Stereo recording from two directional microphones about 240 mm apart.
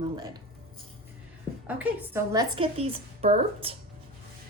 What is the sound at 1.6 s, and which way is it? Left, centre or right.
A woman's voice, centre.